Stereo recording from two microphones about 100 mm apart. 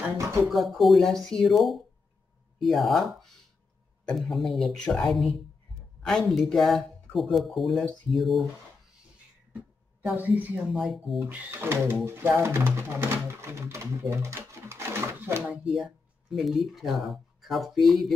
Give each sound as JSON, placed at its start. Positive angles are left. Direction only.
{"t": 0.5, "sound": "speech", "side_deg": 0}
{"t": 10.1, "sound": "speech", "side_deg": -15}
{"t": 10.7, "sound": "speech", "side_deg": 0}
{"t": 11.6, "sound": "speech", "side_deg": -20}
{"t": 15.4, "sound": "speech", "side_deg": -10}